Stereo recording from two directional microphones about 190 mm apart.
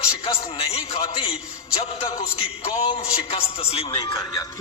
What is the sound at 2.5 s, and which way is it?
A man's voice, 30° left (ahead or behind).